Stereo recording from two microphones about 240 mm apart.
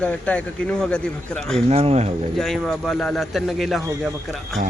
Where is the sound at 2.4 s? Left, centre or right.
Centre.